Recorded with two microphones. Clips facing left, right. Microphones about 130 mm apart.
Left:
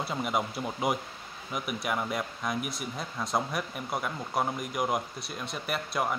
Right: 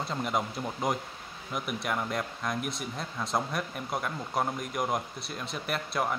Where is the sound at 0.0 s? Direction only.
5° left (ahead or behind).